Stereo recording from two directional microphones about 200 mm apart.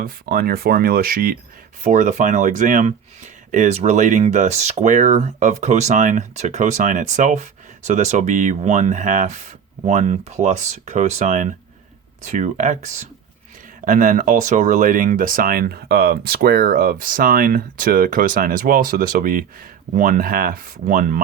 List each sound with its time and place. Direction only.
0.0 s speech: 45° right (ahead or behind)